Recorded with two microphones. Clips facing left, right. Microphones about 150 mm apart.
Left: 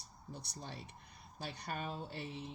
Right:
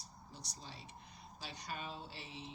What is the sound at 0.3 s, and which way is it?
Speech, 60° left (ahead or behind).